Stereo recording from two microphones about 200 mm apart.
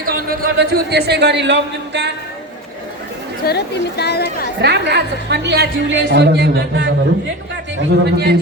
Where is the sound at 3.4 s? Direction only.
55° left (ahead or behind).